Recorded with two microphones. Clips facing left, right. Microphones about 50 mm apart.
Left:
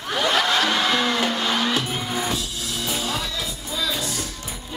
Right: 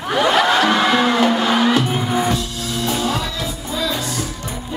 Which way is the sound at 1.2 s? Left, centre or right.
Centre.